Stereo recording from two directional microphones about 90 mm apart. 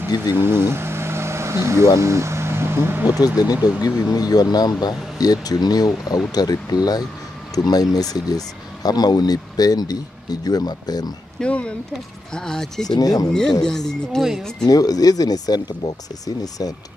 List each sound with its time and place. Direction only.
0.4 s a sound: 25° right (ahead or behind)
2.0 s speech: 30° right (ahead or behind)
3.6 s speech: 45° left (ahead or behind)
11.3 s speech: 10° left (ahead or behind)
12.8 s speech: 45° left (ahead or behind)
13.3 s speech: 10° left (ahead or behind)
14.7 s speech: 45° left (ahead or behind)